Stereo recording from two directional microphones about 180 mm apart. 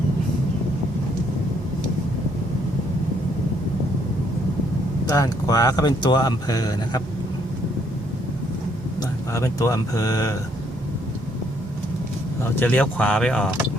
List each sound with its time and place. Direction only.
5.0 s speech: 20° left (ahead or behind)
9.0 s speech: 20° left (ahead or behind)
12.4 s speech: 10° left (ahead or behind)